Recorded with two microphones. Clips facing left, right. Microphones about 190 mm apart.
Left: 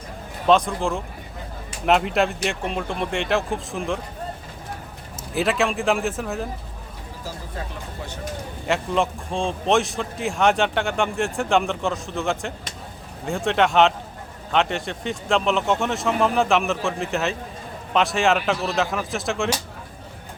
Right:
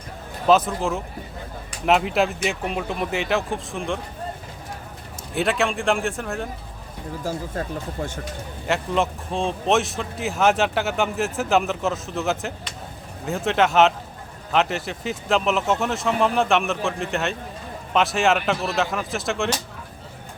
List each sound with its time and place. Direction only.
0.4 s a man's voice: 5° right (ahead or behind)
5.3 s a man's voice: centre (ahead or behind)
7.3 s speech: 50° right (ahead or behind)
8.6 s a man's voice: centre (ahead or behind)